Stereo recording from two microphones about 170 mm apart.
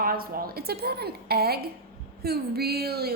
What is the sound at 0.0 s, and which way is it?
A woman's voice, 60° right (ahead or behind).